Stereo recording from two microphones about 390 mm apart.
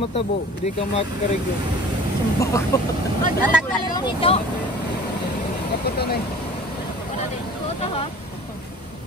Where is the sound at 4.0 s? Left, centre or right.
Centre.